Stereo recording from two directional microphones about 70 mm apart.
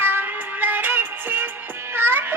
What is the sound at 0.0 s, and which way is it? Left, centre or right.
Music, right.